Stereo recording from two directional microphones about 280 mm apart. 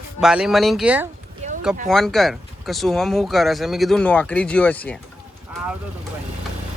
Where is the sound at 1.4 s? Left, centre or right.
Right.